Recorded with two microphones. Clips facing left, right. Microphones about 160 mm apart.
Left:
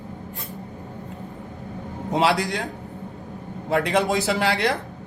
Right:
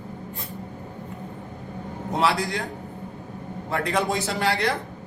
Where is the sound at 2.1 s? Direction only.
75° left (ahead or behind).